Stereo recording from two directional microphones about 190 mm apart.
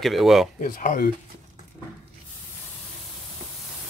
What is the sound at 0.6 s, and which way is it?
Speech, 45° left (ahead or behind).